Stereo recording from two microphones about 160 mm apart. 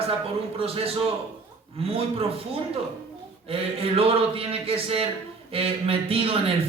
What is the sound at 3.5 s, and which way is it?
Speech, 35° right (ahead or behind).